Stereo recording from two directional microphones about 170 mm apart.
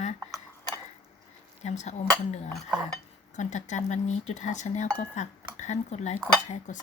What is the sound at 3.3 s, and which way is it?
Speech, 45° left (ahead or behind).